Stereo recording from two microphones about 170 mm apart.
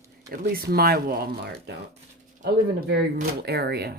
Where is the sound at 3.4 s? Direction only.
75° right (ahead or behind).